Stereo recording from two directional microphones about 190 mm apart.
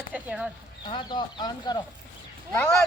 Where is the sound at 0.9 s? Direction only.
25° left (ahead or behind).